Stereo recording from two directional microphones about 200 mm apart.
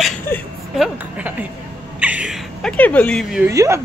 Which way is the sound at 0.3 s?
10° left (ahead or behind).